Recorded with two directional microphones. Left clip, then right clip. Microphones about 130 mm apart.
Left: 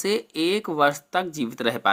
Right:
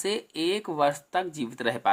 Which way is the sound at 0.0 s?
25° left (ahead or behind).